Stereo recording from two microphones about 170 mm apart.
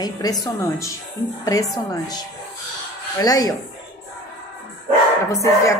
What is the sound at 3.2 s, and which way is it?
Speech, 20° left (ahead or behind).